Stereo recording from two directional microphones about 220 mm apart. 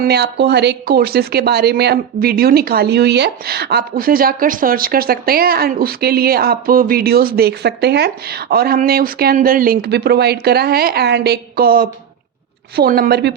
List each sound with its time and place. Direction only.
0.0 s speech: 50° right (ahead or behind)